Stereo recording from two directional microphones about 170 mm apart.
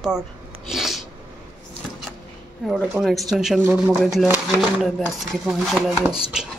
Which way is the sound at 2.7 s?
Centre (ahead or behind).